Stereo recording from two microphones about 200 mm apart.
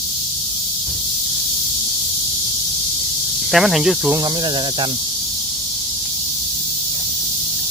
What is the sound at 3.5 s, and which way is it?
Speech, centre (ahead or behind).